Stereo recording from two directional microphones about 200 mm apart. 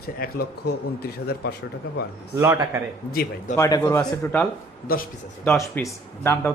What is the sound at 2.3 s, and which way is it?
Speech, 15° right (ahead or behind).